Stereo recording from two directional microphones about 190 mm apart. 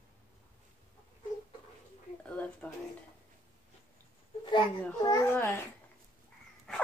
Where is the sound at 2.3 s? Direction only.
5° left (ahead or behind).